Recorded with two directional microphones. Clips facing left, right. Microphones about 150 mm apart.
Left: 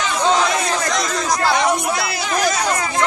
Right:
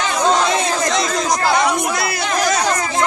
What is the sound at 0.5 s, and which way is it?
Chatter, 25° right (ahead or behind).